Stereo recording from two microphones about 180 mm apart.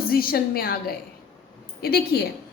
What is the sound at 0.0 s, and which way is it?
A woman's voice, 55° left (ahead or behind).